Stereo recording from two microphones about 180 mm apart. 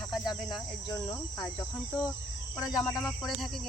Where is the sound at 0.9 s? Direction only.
20° left (ahead or behind).